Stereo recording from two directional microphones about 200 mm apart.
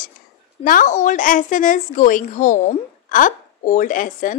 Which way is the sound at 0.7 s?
40° left (ahead or behind).